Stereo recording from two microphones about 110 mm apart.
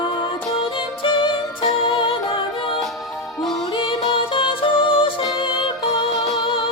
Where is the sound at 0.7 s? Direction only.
55° left (ahead or behind).